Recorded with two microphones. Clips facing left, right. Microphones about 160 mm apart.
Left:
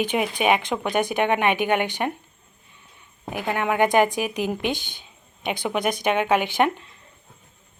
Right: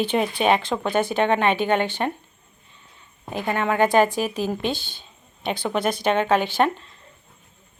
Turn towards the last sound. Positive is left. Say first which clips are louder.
# right 1 dB
turn(degrees=15)  # may be behind; listen again after turning